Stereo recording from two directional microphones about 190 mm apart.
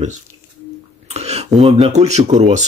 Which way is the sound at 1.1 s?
35° right (ahead or behind).